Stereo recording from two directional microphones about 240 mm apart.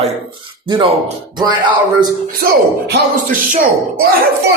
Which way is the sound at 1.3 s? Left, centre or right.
Centre.